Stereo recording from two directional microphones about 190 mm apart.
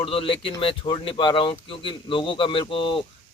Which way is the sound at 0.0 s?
30° left (ahead or behind).